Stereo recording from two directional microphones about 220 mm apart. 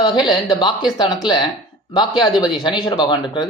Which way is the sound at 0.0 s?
20° left (ahead or behind).